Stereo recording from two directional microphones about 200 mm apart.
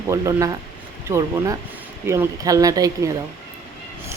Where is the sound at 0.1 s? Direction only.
15° right (ahead or behind).